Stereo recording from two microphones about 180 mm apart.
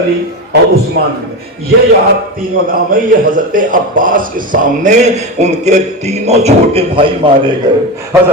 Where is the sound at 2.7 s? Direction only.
50° right (ahead or behind); by 7.3 s 30° right (ahead or behind).